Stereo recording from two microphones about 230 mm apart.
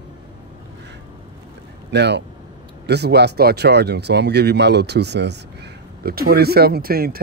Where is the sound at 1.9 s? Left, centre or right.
Right.